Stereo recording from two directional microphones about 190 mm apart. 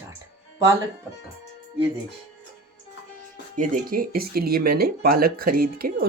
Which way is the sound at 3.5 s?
45° right (ahead or behind).